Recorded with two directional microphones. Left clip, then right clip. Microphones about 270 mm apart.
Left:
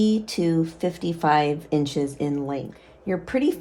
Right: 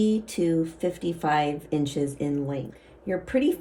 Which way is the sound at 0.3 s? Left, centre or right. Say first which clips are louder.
Left 2 dB; left.